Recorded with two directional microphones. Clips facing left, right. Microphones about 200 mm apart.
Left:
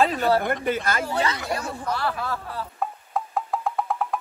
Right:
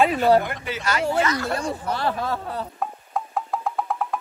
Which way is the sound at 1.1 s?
30° left (ahead or behind).